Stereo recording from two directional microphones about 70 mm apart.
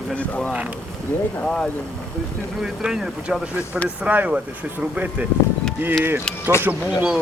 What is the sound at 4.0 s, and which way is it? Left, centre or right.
Speech, right.